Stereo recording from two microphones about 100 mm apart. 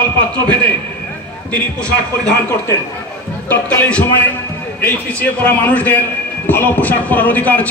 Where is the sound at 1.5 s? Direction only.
10° left (ahead or behind).